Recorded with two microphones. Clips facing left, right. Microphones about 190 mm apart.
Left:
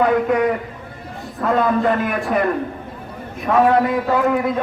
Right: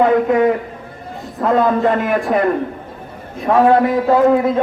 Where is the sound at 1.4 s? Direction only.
20° right (ahead or behind).